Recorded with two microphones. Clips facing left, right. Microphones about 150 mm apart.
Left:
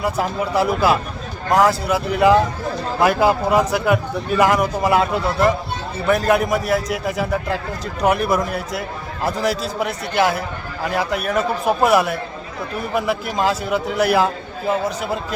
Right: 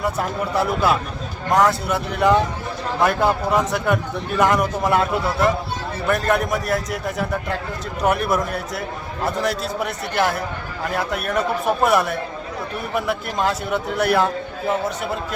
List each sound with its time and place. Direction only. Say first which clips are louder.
0.0 s a man's voice: left 2 dB; centre (ahead or behind)